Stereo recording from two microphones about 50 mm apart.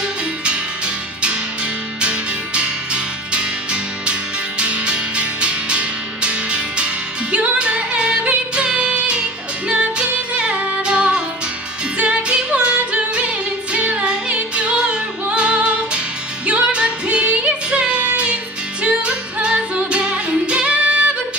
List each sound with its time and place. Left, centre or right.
2.0 s music: right